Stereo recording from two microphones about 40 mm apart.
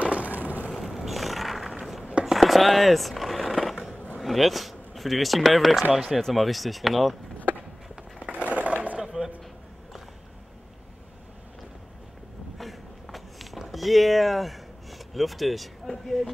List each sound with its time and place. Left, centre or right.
0.0 s vehicle: right
0.7 s skateboard: centre
4.2 s speech: centre
8.3 s a sound: right
9.0 s a sound: centre
12.5 s walk: centre